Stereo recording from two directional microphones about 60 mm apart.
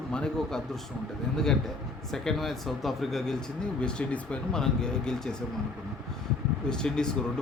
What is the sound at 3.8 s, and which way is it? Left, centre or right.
Speech, centre.